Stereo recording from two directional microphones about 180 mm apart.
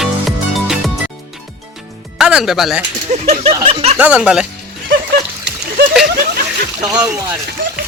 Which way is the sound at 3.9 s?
5° right (ahead or behind).